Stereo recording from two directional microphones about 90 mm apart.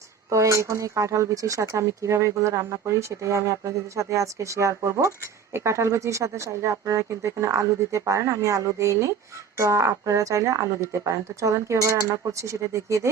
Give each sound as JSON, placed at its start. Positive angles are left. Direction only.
{"t": 0.3, "sound": "speech", "side_deg": -35}